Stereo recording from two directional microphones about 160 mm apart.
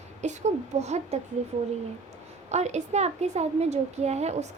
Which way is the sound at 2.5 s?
45° right (ahead or behind).